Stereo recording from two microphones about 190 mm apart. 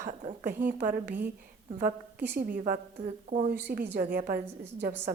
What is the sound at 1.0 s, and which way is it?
Speech, 10° right (ahead or behind).